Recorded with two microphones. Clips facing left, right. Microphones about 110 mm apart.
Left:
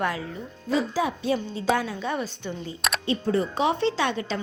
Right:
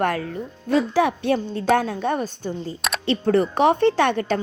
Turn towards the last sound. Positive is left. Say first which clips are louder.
# right 6 dB
turn(degrees=-55)  # may be behind; listen again after turning